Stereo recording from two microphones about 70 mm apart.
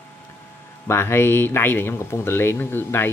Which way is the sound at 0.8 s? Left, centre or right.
Left.